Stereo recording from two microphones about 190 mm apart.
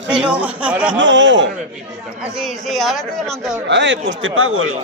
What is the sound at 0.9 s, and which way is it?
Speech, 75° right (ahead or behind).